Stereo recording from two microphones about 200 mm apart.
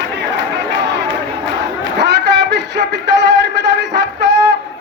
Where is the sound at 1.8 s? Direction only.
60° right (ahead or behind).